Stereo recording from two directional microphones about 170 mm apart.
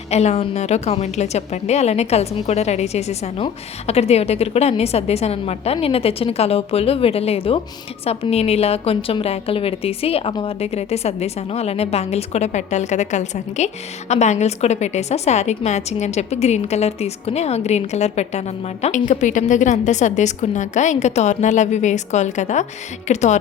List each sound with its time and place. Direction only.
0.1 s a woman's voice: 40° left (ahead or behind)